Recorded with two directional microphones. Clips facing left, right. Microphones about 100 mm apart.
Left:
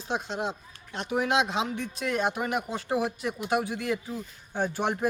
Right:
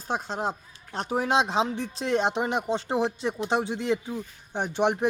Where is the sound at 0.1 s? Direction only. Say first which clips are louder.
Right 2 dB; 40° right (ahead or behind).